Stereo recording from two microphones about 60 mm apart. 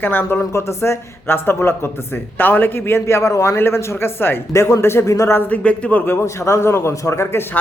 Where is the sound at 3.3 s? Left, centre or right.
Left.